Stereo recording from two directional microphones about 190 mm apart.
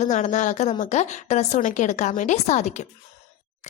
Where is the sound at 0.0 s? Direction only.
40° left (ahead or behind).